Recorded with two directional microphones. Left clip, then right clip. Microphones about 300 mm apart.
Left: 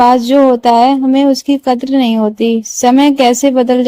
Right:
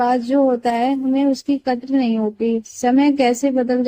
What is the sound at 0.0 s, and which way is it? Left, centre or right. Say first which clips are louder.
Speech: left 9 dB; left.